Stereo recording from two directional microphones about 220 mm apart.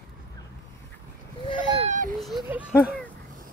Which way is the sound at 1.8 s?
35° right (ahead or behind).